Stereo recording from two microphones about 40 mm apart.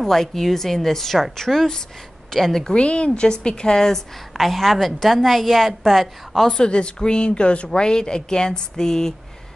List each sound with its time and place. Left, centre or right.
0.0 s a woman's voice: centre
2.7 s a woman's voice: left; by 6.5 s centre
6.5 s a woman's voice: left